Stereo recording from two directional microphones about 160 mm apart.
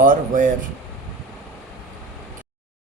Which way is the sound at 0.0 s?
55° right (ahead or behind).